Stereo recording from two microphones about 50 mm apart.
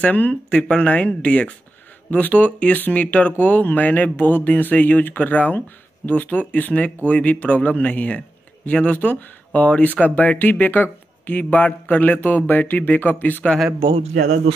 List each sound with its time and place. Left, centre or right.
0.0 s speech: left